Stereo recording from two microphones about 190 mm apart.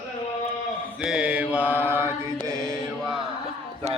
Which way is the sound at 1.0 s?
5° right (ahead or behind).